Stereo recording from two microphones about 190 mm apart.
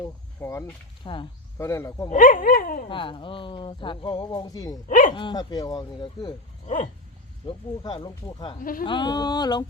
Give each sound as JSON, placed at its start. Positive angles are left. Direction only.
{"t": 0.0, "sound": "speech", "side_deg": 15}
{"t": 1.0, "sound": "speech", "side_deg": 25}
{"t": 1.5, "sound": "speech", "side_deg": 15}
{"t": 2.0, "sound": "speech", "side_deg": 45}
{"t": 2.9, "sound": "speech", "side_deg": 25}
{"t": 4.9, "sound": "speech", "side_deg": 45}
{"t": 5.1, "sound": "speech", "side_deg": 25}
{"t": 6.7, "sound": "wild animals", "side_deg": 40}
{"t": 7.4, "sound": "speech", "side_deg": 25}